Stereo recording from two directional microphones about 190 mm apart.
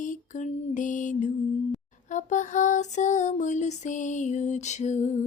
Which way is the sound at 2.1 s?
40° left (ahead or behind).